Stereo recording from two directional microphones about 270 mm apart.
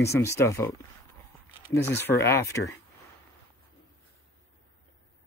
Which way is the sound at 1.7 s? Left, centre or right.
Centre.